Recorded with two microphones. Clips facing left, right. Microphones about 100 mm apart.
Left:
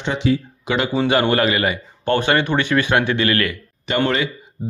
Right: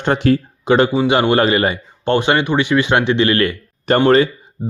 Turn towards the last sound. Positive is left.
turn(degrees=-40)  # may be behind; listen again after turning